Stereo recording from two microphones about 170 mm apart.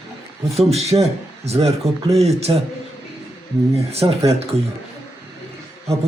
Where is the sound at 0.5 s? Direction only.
40° right (ahead or behind).